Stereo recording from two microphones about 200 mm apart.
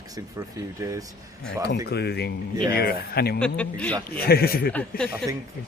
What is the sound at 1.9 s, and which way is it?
Speech, 55° left (ahead or behind).